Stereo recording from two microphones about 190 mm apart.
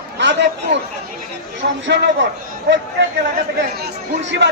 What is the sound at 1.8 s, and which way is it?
Speech, 70° right (ahead or behind).